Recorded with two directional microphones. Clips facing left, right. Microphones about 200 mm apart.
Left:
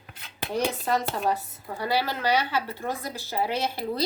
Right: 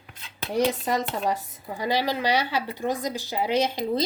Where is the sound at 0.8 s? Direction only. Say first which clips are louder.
Even; 15° right (ahead or behind).